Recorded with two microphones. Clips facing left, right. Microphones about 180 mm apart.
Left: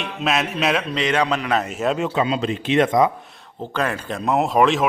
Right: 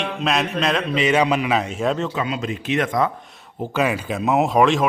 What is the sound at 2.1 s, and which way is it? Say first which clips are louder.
Speech: left 4 dB; 30° left (ahead or behind).